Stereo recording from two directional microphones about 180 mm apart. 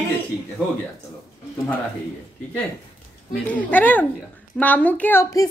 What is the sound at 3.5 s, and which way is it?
A woman's voice, 10° left (ahead or behind).